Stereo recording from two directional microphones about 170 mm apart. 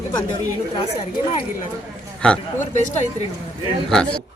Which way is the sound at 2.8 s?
45° left (ahead or behind).